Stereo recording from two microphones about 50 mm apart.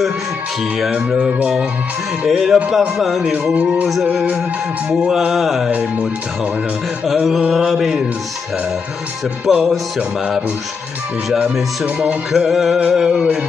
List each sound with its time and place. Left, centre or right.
0.9 s music: right
2.2 s speech: centre
3.5 s music: right
3.9 s music: centre
7.1 s speech: centre
9.5 s music: centre
12.3 s speech: centre
12.9 s music: centre